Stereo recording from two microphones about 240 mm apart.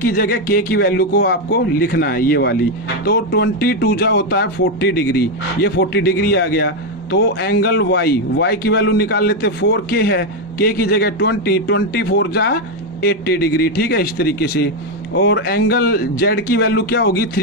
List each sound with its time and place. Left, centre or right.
0.0 s speech: left